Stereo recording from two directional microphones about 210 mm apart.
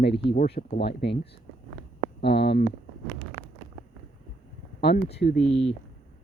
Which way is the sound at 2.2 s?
50° left (ahead or behind).